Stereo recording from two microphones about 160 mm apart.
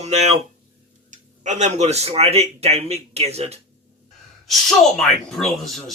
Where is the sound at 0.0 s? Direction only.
45° right (ahead or behind).